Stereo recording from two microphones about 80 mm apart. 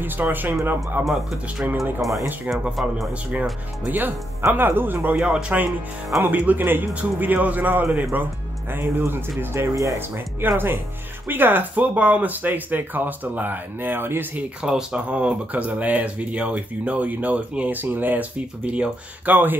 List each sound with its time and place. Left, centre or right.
0.0 s speech: right
1.0 s speech: centre
4.5 s speech: right
14.6 s speech: centre